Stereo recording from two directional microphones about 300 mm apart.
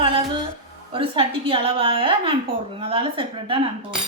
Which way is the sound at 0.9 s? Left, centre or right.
Centre.